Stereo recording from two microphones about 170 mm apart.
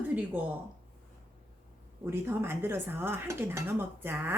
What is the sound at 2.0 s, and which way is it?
A woman's voice, 15° right (ahead or behind).